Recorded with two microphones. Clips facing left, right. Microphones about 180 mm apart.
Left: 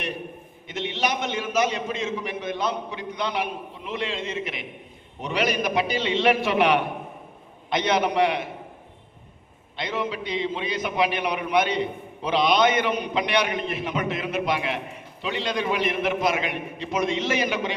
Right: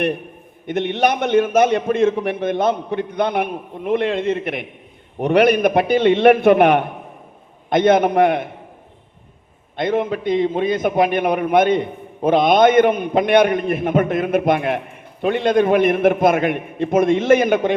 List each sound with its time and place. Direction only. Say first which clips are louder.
0.7 s a man's voice: right 9 dB; 55° right (ahead or behind)
9.7 s a man's voice: right 9 dB; 50° right (ahead or behind)